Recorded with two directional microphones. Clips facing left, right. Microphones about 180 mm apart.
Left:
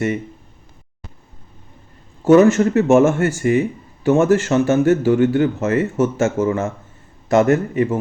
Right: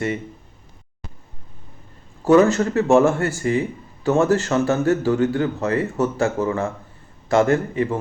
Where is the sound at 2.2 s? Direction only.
20° left (ahead or behind).